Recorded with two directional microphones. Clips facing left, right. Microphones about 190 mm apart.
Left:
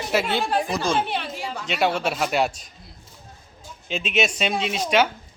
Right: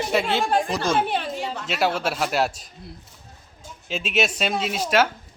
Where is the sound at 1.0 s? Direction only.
45° right (ahead or behind).